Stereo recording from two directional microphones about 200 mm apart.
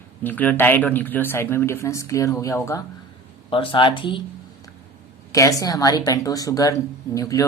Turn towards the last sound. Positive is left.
turn(degrees=15)  # may be behind; listen again after turning